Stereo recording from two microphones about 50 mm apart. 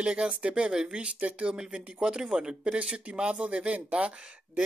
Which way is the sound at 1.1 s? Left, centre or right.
Right.